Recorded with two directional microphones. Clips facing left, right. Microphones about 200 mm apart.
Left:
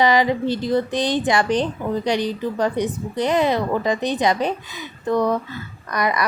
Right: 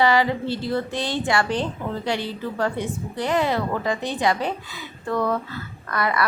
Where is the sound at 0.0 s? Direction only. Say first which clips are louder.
Left 2 dB; 15° left (ahead or behind).